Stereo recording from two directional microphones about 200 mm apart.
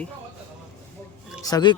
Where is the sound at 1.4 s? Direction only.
20° left (ahead or behind).